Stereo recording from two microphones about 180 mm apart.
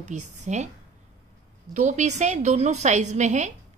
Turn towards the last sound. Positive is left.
turn(degrees=-40)  # may be behind; listen again after turning